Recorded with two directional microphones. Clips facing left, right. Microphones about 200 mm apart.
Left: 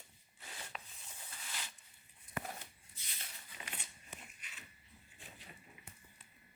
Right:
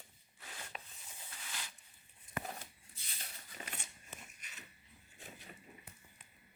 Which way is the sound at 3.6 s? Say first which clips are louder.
Right 2 dB; 40° right (ahead or behind).